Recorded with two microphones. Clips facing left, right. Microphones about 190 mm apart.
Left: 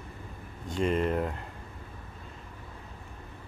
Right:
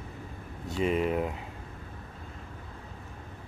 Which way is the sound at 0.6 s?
5° right (ahead or behind).